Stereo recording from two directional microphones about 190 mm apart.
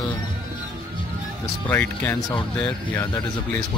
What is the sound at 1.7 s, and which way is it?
Speech, 10° left (ahead or behind).